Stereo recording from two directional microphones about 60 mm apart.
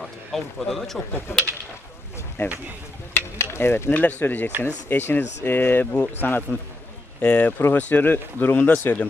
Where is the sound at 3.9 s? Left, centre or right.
Left.